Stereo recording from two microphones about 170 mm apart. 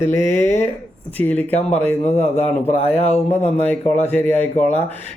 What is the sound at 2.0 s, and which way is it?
Speech, 40° left (ahead or behind).